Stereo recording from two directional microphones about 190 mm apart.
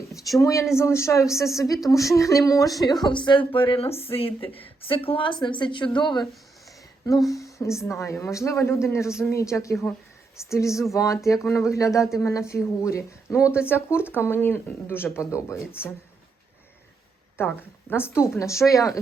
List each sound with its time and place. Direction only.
0.3 s a woman's voice: 15° left (ahead or behind)
7.3 s speech: 15° left (ahead or behind)
17.3 s speech: 10° left (ahead or behind)